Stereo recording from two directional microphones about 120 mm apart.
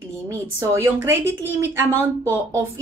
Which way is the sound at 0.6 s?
20° right (ahead or behind).